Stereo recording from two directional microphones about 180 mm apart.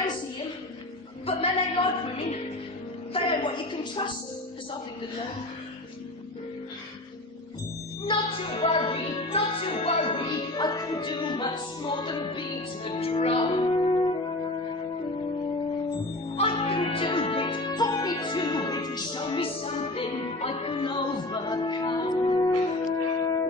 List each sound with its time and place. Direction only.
1.2 s music: 30° left (ahead or behind)
3.1 s a woman's voice: 30° left (ahead or behind)
8.1 s music: 30° left (ahead or behind)
16.3 s music: 30° left (ahead or behind)